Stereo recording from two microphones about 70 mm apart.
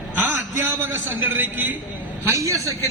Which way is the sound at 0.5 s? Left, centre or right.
Right.